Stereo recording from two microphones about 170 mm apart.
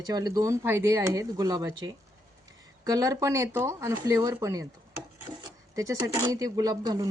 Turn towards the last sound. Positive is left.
turn(degrees=-20)  # may be behind; listen again after turning